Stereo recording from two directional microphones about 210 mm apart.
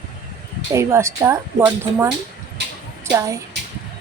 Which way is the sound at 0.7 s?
15° right (ahead or behind).